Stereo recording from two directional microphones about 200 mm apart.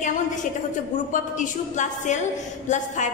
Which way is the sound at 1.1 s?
40° left (ahead or behind).